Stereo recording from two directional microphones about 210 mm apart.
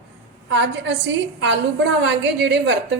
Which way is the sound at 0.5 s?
55° right (ahead or behind).